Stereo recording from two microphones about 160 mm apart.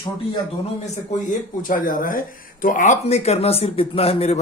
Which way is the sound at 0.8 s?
50° left (ahead or behind).